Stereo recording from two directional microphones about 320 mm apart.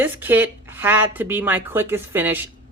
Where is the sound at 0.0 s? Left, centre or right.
Centre.